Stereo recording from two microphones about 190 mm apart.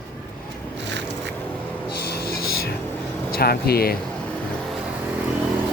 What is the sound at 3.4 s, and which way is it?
Speech, 55° left (ahead or behind).